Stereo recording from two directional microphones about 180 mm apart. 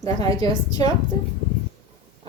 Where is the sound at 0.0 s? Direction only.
20° left (ahead or behind).